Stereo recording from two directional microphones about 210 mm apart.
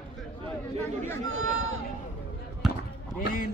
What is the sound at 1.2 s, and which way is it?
Chatter, 70° right (ahead or behind).